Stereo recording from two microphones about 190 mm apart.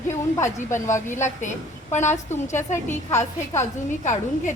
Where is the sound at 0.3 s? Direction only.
15° left (ahead or behind).